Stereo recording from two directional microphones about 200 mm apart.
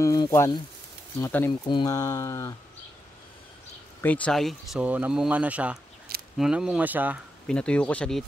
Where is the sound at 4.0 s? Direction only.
5° left (ahead or behind); by 7.2 s 10° right (ahead or behind).